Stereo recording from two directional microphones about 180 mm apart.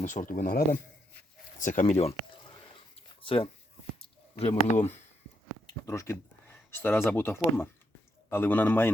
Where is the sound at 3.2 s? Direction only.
30° left (ahead or behind).